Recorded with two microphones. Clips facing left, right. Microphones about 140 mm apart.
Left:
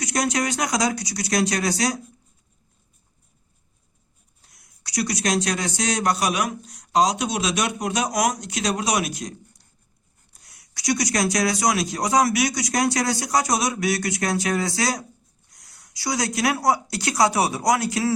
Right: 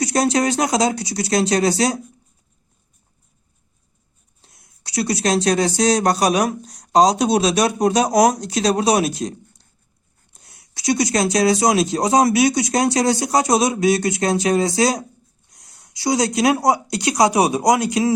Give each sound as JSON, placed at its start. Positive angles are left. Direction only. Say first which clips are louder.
{"t": 0.0, "sound": "speech", "louder": "right 6 dB", "side_deg": -30}
{"t": 4.4, "sound": "speech", "louder": "right 4 dB", "side_deg": -25}
{"t": 10.4, "sound": "speech", "louder": "right 4 dB", "side_deg": -25}